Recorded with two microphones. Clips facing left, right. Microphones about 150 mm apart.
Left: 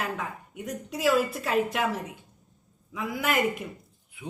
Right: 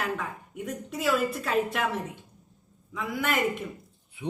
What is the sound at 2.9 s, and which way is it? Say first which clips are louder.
Speech: even; centre (ahead or behind).